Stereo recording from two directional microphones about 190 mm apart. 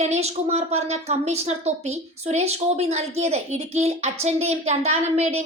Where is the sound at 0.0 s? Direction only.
35° right (ahead or behind).